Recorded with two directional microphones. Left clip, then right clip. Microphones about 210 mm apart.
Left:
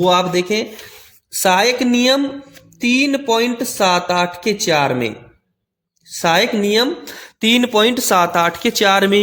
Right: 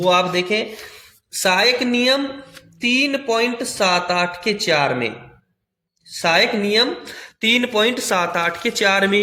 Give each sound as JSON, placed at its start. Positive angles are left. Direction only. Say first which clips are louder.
{"t": 0.0, "sound": "speech", "louder": "left 2 dB", "side_deg": 50}